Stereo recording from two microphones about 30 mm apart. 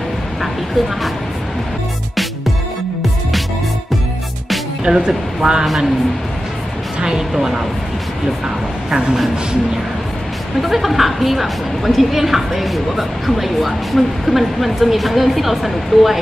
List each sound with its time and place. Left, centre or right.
4.8 s speech: right
7.0 s speech: right
7.3 s a woman's voice: centre
10.6 s a woman's voice: centre